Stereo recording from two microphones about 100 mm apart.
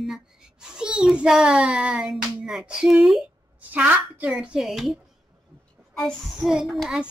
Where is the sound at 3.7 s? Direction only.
15° right (ahead or behind).